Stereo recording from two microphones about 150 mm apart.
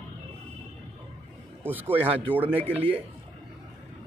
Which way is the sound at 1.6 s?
10° right (ahead or behind).